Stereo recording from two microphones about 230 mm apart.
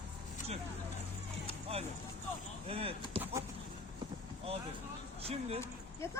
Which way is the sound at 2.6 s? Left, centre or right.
Right.